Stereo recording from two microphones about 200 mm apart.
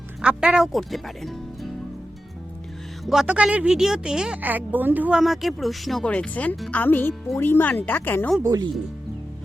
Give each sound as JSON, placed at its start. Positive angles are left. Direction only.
{"t": 0.2, "sound": "speech", "side_deg": -5}
{"t": 3.1, "sound": "a woman's voice", "side_deg": -5}
{"t": 8.4, "sound": "speech", "side_deg": -20}